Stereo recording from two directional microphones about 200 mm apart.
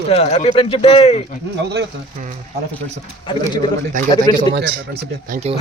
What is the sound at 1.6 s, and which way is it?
Speech, 60° right (ahead or behind).